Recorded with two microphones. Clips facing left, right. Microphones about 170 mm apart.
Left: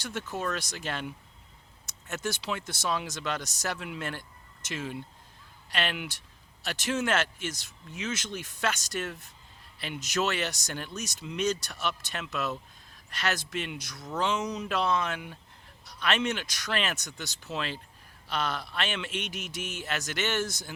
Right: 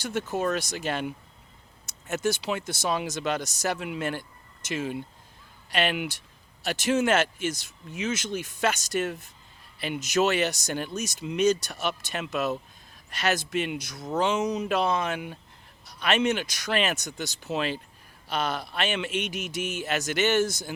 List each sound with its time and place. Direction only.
0.3 s speech: 15° right (ahead or behind)